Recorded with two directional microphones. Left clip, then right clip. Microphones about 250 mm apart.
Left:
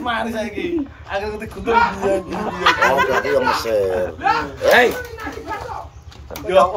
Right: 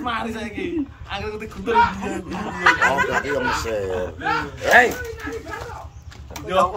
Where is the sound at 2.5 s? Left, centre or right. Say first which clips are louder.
Left 2 dB; centre.